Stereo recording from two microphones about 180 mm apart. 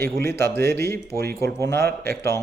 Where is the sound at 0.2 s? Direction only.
15° left (ahead or behind).